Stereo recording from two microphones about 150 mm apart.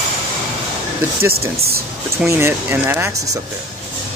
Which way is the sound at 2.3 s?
15° right (ahead or behind).